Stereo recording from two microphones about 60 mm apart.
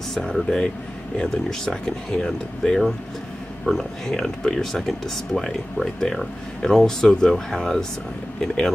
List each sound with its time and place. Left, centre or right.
0.1 s speech: centre